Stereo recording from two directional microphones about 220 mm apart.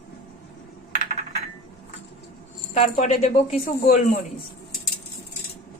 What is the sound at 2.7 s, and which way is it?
Speech, 35° left (ahead or behind).